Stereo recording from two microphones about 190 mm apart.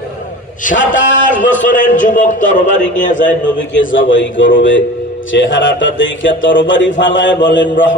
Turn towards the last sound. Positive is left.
turn(degrees=75)  # may be behind; listen again after turning